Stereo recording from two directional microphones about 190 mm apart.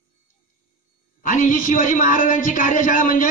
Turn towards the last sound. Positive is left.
turn(degrees=45)  # may be behind; listen again after turning